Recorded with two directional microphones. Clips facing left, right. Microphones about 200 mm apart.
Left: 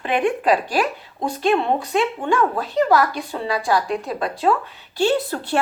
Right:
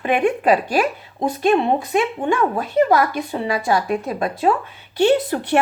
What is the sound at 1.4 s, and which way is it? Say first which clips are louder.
A woman's voice: right 2 dB; 15° right (ahead or behind).